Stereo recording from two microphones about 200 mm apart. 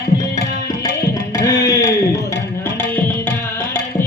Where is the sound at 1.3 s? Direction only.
20° left (ahead or behind).